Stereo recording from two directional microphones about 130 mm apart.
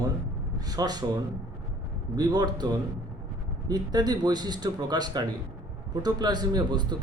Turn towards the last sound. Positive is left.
turn(degrees=-35)  # may be behind; listen again after turning